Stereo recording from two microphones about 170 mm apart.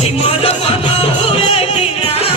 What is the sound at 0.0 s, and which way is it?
Music, 35° left (ahead or behind).